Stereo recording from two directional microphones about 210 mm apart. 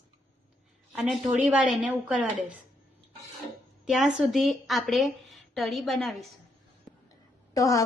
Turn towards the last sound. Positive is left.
turn(degrees=15)  # may be behind; listen again after turning